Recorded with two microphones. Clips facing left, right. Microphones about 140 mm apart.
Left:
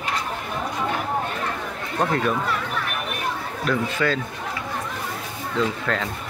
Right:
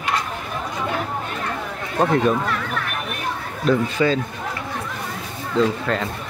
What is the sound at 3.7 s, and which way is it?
Speech, 20° right (ahead or behind).